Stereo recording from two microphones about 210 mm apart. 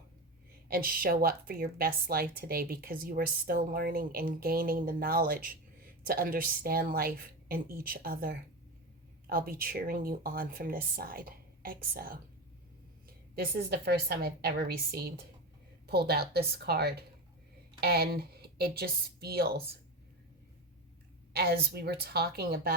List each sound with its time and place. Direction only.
0.7 s a woman's voice: 45° right (ahead or behind)
13.3 s a woman's voice: 50° right (ahead or behind)
21.3 s a woman's voice: 50° right (ahead or behind)